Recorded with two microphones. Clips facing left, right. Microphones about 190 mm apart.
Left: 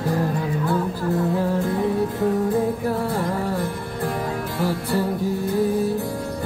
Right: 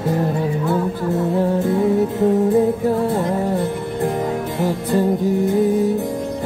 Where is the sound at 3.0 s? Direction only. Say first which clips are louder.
Right 5 dB; 20° right (ahead or behind).